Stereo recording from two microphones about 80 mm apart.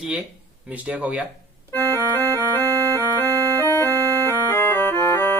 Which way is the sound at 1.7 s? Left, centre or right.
Left.